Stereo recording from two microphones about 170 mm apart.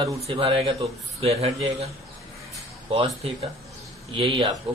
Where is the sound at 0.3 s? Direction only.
30° right (ahead or behind).